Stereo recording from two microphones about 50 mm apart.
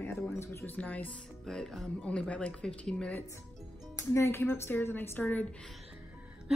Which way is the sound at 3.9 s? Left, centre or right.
Left.